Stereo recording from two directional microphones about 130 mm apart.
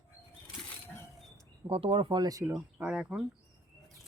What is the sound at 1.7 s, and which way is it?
Speech, 45° right (ahead or behind).